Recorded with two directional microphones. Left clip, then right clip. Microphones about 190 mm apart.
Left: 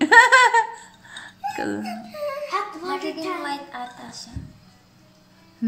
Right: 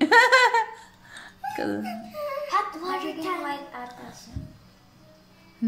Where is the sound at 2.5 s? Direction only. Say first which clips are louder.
Even; 20° right (ahead or behind).